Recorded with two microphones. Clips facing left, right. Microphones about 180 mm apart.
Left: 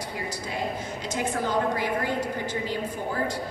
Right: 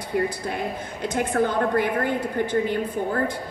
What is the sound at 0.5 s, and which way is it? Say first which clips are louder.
A woman's voice: right 1 dB; 55° right (ahead or behind).